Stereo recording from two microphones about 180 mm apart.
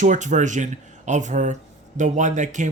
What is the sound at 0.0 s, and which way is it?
Speech, 40° right (ahead or behind).